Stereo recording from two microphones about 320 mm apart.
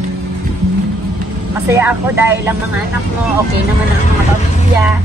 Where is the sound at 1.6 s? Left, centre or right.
Centre.